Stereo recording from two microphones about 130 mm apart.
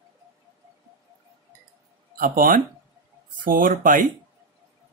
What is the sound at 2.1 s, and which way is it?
Speech, 90° right.